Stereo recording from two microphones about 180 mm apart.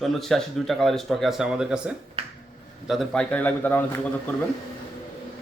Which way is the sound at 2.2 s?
35° right (ahead or behind).